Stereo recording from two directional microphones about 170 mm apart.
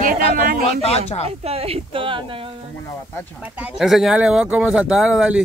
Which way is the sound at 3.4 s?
10° right (ahead or behind).